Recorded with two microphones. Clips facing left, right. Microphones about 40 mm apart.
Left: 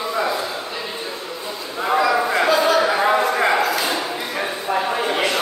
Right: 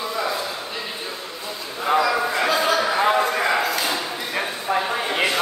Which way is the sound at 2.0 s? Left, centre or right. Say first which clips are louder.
Left 3 dB; centre.